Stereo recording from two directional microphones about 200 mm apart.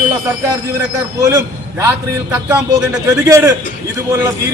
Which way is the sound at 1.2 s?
15° right (ahead or behind).